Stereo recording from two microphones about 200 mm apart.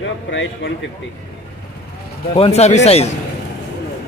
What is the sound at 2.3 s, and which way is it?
Speech, 30° left (ahead or behind).